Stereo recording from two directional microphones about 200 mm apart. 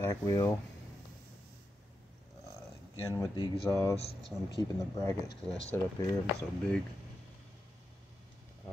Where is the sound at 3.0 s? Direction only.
15° left (ahead or behind).